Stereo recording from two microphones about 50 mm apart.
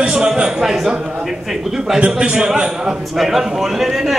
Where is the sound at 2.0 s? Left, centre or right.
Right.